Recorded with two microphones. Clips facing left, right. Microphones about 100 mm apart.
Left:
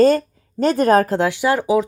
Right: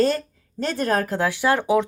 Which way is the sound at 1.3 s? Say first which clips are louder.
Left 2 dB; 15° left (ahead or behind).